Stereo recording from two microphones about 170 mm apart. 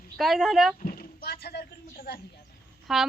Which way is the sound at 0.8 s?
60° left (ahead or behind).